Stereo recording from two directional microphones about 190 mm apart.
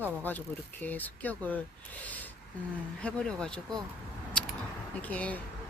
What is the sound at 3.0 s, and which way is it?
Speech, 5° left (ahead or behind).